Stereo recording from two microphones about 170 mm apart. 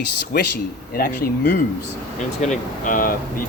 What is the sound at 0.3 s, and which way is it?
Speech, 70° left (ahead or behind).